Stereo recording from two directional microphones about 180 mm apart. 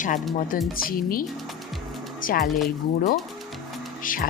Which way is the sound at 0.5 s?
50° left (ahead or behind).